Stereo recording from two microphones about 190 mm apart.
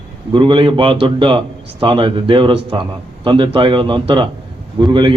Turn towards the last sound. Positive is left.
turn(degrees=-25)  # may be behind; listen again after turning